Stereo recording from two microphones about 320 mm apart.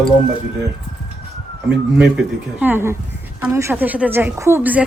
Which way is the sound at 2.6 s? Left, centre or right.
Centre.